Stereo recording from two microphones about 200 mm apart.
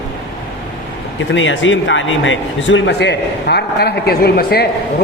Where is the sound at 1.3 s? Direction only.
70° left (ahead or behind).